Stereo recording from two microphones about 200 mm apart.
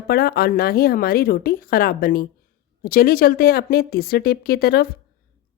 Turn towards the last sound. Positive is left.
turn(degrees=50)  # may be behind; listen again after turning